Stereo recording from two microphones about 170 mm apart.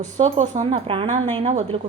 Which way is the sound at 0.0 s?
45° right (ahead or behind).